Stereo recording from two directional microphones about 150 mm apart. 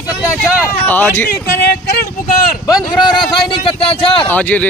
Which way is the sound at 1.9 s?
85° left.